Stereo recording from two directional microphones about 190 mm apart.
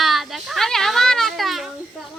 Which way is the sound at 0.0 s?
Centre (ahead or behind).